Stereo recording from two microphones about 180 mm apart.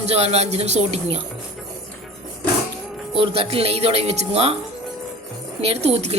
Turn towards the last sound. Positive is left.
turn(degrees=-35)  # may be behind; listen again after turning